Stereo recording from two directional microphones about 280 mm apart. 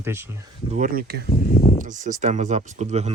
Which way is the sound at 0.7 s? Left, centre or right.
Right.